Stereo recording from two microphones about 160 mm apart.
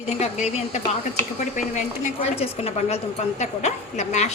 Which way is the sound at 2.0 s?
40° left (ahead or behind).